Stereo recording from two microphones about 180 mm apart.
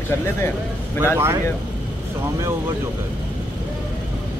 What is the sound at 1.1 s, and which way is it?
Speech, 15° right (ahead or behind).